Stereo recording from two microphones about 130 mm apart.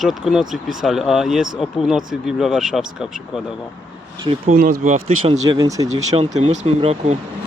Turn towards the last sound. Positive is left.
turn(degrees=-55)  # may be behind; listen again after turning